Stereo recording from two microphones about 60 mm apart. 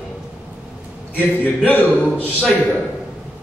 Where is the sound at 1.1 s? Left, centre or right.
Left.